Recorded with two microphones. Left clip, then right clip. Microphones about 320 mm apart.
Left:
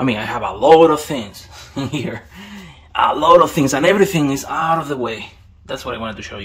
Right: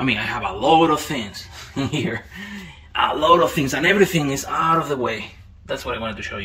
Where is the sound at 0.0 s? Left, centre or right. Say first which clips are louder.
Left 2 dB; centre.